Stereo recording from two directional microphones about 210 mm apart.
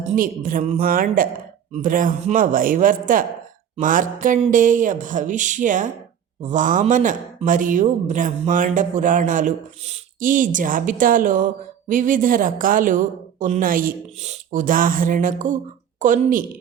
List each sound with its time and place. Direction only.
0.1 s speech: 40° right (ahead or behind)